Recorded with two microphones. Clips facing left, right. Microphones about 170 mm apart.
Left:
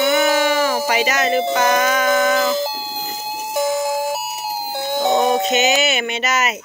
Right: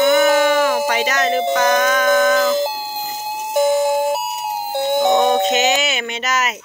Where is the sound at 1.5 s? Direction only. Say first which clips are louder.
Right 1 dB; 5° left (ahead or behind).